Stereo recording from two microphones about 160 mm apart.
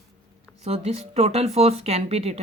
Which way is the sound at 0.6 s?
40° right (ahead or behind).